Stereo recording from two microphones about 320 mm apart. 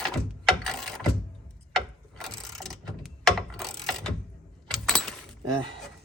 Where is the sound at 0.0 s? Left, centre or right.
Centre.